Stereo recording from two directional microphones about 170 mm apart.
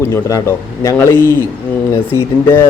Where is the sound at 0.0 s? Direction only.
15° left (ahead or behind).